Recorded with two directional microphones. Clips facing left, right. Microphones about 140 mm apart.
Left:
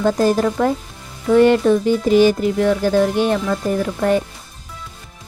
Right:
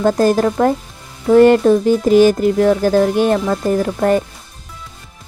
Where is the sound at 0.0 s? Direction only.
45° right (ahead or behind).